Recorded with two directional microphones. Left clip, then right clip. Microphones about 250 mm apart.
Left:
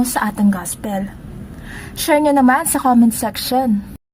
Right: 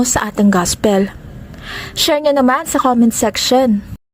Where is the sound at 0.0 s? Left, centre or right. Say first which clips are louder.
Right 3 dB; centre.